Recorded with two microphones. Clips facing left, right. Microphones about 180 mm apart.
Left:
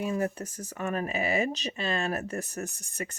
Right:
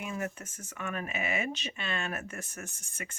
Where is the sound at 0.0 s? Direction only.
35° left (ahead or behind).